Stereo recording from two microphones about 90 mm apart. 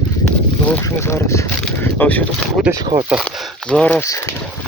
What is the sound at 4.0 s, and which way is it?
Speech, 40° left (ahead or behind).